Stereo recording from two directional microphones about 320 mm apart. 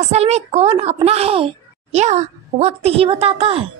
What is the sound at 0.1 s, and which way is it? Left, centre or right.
A woman's voice, centre.